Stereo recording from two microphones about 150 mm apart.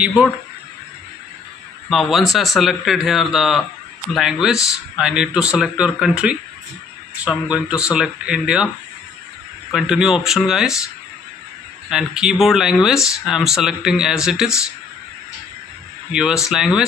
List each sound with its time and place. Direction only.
0.0 s speech: 5° right (ahead or behind)
1.9 s speech: centre (ahead or behind)
9.7 s speech: 5° right (ahead or behind)
11.9 s speech: 5° right (ahead or behind)
16.1 s speech: 5° right (ahead or behind)